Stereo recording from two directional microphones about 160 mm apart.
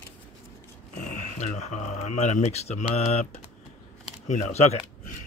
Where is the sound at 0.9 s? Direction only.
50° left (ahead or behind).